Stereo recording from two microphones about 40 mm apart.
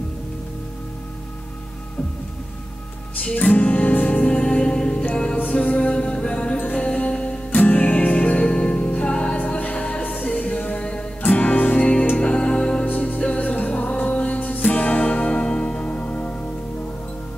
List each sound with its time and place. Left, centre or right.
3.5 s music: left
4.2 s music: left